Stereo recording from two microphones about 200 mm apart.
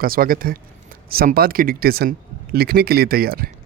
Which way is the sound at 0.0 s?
45° right (ahead or behind).